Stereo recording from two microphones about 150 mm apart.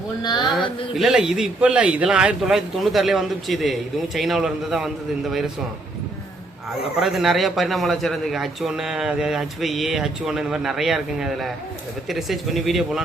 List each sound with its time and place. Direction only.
0.2 s speech: 30° left (ahead or behind)
0.9 s a man's voice: centre (ahead or behind)
6.7 s a man's voice: centre (ahead or behind)